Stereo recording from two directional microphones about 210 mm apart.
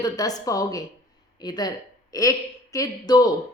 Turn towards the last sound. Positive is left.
turn(degrees=20)  # may be behind; listen again after turning